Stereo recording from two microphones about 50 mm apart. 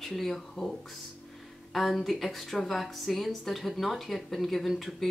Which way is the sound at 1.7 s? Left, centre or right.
Centre.